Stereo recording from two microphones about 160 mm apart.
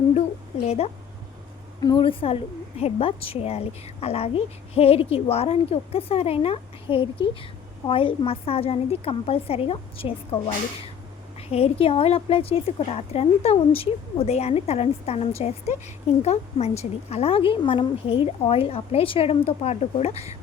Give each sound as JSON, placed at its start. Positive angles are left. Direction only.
{"t": 0.6, "sound": "a woman's voice", "side_deg": 40}
{"t": 1.8, "sound": "a woman's voice", "side_deg": 30}